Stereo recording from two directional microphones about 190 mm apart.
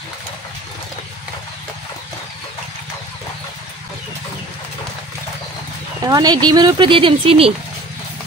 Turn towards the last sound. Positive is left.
turn(degrees=-30)  # may be behind; listen again after turning